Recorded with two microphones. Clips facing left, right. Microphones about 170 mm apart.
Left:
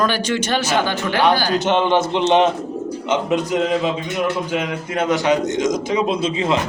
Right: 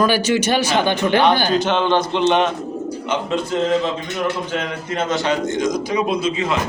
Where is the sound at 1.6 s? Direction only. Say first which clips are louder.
Left 1 dB; 15° left (ahead or behind).